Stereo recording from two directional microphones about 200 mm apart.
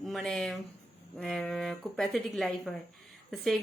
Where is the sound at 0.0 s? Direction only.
Centre (ahead or behind).